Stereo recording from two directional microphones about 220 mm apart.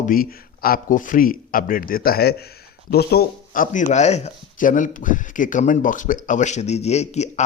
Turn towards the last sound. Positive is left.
turn(degrees=30)  # may be behind; listen again after turning